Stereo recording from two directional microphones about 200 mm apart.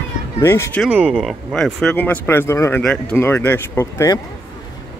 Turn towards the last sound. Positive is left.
turn(degrees=15)  # may be behind; listen again after turning